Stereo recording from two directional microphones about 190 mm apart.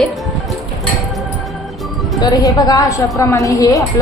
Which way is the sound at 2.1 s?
20° left (ahead or behind).